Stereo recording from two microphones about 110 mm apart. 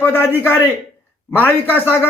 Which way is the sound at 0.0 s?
20° left (ahead or behind).